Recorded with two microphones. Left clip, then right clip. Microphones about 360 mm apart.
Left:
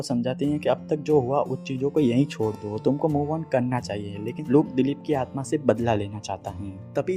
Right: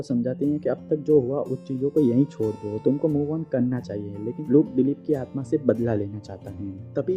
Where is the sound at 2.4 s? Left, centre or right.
Centre.